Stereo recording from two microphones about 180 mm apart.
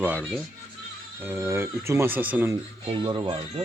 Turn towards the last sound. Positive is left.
turn(degrees=-25)  # may be behind; listen again after turning